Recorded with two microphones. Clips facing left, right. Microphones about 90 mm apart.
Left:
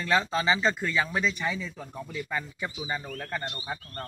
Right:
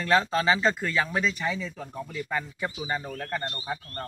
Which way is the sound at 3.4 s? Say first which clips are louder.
Right 2 dB; 15° left (ahead or behind).